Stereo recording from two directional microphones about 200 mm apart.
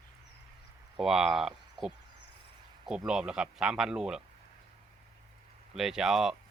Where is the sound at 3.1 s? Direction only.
5° right (ahead or behind).